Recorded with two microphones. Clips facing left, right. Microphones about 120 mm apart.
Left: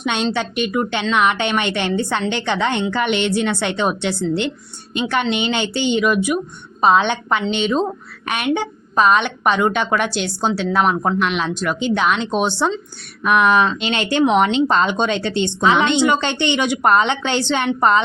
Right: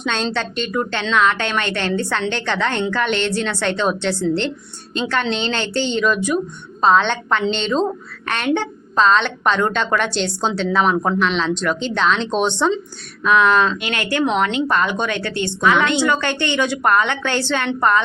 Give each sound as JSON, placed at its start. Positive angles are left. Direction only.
{"t": 0.0, "sound": "a woman's voice", "side_deg": 10}
{"t": 13.7, "sound": "a woman's voice", "side_deg": 25}